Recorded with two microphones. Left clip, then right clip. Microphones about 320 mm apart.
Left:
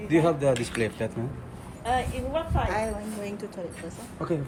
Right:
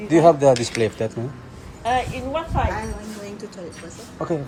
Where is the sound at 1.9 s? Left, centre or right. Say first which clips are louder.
Right 5 dB; right.